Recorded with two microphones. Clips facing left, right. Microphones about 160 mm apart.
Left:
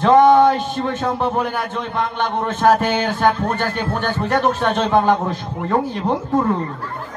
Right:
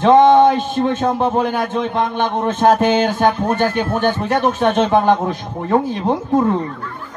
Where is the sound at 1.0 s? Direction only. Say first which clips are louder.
Right 3 dB; 20° right (ahead or behind).